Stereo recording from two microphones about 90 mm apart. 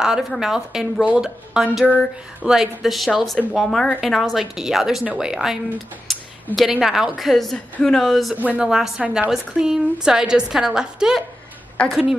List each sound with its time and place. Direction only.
0.0 s a woman's voice: 5° right (ahead or behind)
6.1 s a sound: centre (ahead or behind)
6.5 s speech: centre (ahead or behind)
7.5 s speech: 10° left (ahead or behind)
8.4 s a woman's voice: 20° right (ahead or behind)
8.6 s speech: 5° right (ahead or behind)
9.0 s a woman's voice: 15° right (ahead or behind)